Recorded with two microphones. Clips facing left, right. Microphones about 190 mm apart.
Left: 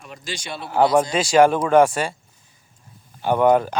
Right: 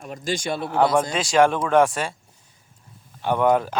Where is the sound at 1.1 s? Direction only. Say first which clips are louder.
Left 3 dB; centre (ahead or behind).